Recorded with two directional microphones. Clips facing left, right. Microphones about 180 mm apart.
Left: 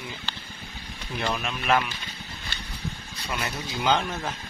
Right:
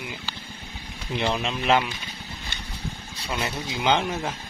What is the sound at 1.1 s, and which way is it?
Speech, 25° right (ahead or behind).